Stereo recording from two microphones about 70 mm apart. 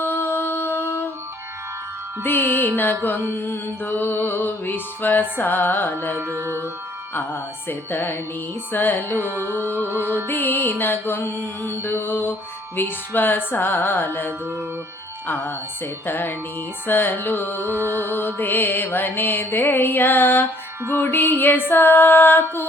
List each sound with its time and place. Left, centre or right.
0.0 s music: left
2.2 s music: left
6.1 s music: right
7.1 s music: left
9.2 s music: right
10.2 s music: left
17.6 s music: right
18.1 s music: left